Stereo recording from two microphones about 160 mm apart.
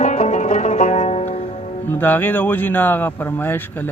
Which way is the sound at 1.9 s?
10° left (ahead or behind).